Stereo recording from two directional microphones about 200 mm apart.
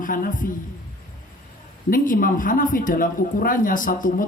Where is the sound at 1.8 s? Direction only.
45° left (ahead or behind).